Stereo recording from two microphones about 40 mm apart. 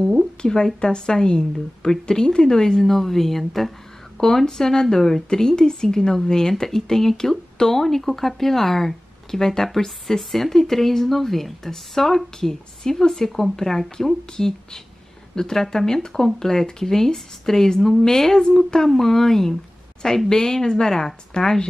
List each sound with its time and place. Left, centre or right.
0.4 s speech: centre